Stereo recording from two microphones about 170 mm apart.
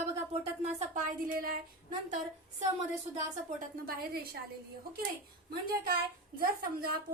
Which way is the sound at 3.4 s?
60° right (ahead or behind).